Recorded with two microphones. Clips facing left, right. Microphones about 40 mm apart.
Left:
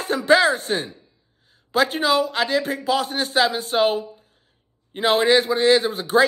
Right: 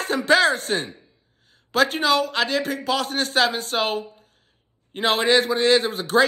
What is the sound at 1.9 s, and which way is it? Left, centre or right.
A woman's voice, right.